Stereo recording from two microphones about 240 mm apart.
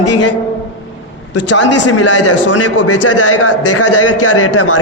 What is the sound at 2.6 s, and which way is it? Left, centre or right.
A man's voice, left.